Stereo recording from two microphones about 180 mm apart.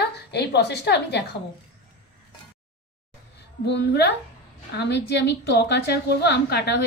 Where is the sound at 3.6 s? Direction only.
70° left (ahead or behind).